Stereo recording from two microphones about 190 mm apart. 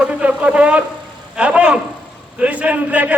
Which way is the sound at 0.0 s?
5° right (ahead or behind).